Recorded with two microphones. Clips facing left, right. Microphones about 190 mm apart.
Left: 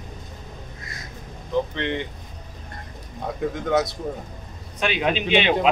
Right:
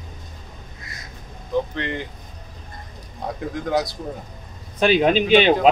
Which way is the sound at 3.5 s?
Centre (ahead or behind).